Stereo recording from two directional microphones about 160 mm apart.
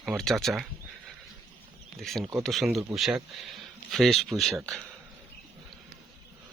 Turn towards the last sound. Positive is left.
turn(degrees=0)  # may be behind; listen again after turning